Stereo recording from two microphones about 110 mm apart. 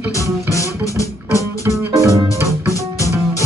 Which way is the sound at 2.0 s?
30° right (ahead or behind).